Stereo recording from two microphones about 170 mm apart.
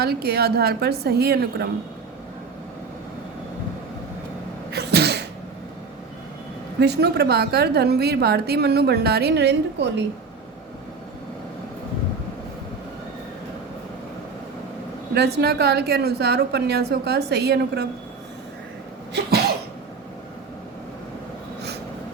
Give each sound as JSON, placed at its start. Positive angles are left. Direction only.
{"t": 0.0, "sound": "a woman's voice", "side_deg": -70}
{"t": 4.7, "sound": "sneeze", "side_deg": -75}
{"t": 6.7, "sound": "a woman's voice", "side_deg": -75}
{"t": 15.1, "sound": "a woman's voice", "side_deg": -75}